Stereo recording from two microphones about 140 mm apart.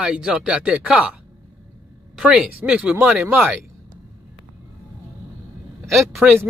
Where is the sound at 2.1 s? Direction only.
5° right (ahead or behind).